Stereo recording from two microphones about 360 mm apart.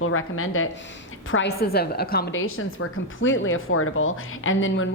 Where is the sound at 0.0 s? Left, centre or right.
Left.